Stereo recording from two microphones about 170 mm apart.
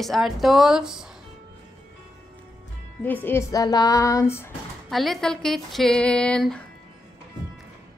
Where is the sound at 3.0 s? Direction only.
10° left (ahead or behind).